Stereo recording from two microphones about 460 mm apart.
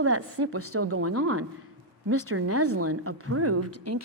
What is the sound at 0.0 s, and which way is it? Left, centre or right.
A woman's voice, right.